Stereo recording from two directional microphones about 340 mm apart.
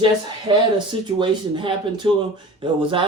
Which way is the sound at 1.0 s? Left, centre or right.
Centre.